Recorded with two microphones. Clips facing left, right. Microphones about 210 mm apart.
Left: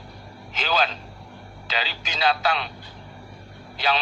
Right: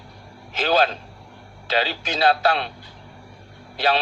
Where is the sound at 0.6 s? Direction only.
50° right (ahead or behind).